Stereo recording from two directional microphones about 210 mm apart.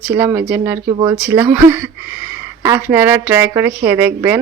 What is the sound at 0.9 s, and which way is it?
Speech, 20° right (ahead or behind).